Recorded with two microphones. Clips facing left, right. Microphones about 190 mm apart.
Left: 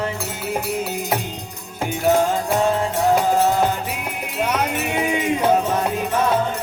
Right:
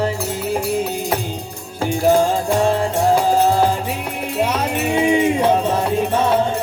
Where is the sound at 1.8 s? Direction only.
30° right (ahead or behind).